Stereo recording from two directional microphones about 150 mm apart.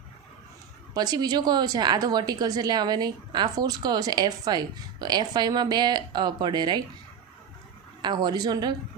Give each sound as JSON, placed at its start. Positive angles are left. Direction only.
{"t": 0.9, "sound": "a woman's voice", "side_deg": -25}
{"t": 8.0, "sound": "a woman's voice", "side_deg": -30}